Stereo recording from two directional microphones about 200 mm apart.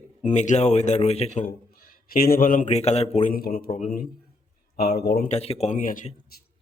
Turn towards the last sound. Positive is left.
turn(degrees=40)  # may be behind; listen again after turning